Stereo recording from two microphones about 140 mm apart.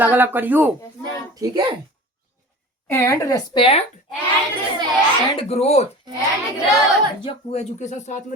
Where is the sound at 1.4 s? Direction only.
30° right (ahead or behind).